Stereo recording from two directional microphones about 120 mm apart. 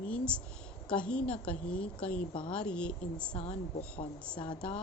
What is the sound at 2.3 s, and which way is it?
Speech, 45° left (ahead or behind).